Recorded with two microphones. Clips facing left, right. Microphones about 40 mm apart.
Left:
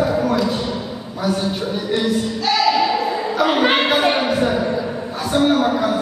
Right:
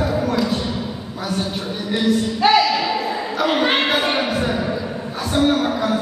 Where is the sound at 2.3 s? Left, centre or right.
Right.